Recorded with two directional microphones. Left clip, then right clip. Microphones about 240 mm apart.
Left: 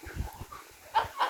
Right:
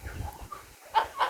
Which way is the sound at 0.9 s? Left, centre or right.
Right.